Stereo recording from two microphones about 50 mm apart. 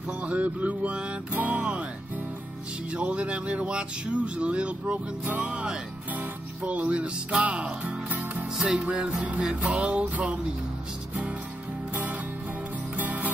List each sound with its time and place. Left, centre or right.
0.2 s speech: right
2.9 s speech: right
8.5 s speech: centre
11.9 s music: right